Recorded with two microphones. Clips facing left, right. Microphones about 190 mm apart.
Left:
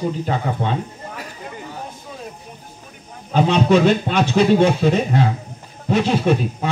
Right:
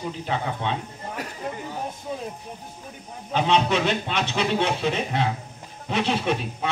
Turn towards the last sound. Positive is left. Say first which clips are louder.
# left 7 dB
turn(degrees=45)  # may be behind; listen again after turning